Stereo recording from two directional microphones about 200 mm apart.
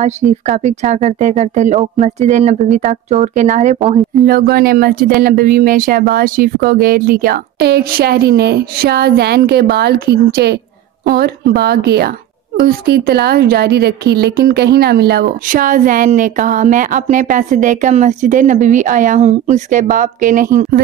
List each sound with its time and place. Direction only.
0.0 s a woman's voice: 35° right (ahead or behind)
4.3 s a woman's voice: 50° right (ahead or behind)